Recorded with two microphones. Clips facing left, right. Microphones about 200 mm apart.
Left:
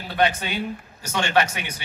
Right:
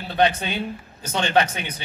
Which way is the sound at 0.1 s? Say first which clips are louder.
Right 2 dB; 25° right (ahead or behind).